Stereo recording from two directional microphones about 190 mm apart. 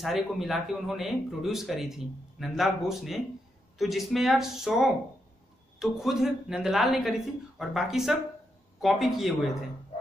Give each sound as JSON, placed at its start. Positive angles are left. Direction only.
{"t": 0.0, "sound": "speech", "side_deg": 0}